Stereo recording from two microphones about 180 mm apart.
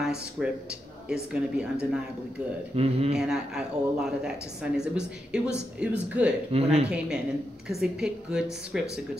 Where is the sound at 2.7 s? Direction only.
35° right (ahead or behind).